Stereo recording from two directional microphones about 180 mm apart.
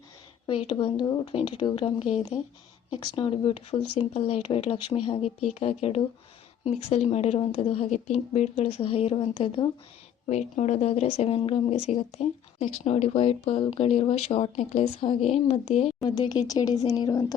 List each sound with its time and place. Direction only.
0.4 s speech: 30° left (ahead or behind)
7.1 s speech: 35° left (ahead or behind)
16.0 s speech: 25° left (ahead or behind)